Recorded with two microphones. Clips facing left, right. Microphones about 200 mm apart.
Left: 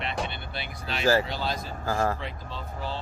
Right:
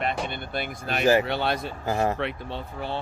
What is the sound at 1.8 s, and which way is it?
Speech, 20° right (ahead or behind).